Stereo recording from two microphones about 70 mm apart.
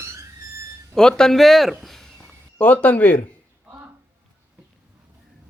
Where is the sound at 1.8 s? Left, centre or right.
Centre.